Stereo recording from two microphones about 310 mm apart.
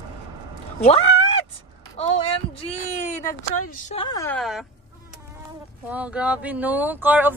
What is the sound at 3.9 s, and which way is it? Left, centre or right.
Speech, centre.